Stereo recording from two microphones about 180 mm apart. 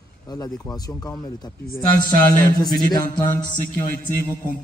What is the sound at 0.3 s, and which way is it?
Speech, 20° left (ahead or behind).